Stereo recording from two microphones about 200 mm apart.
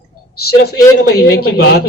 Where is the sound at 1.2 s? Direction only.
50° left (ahead or behind).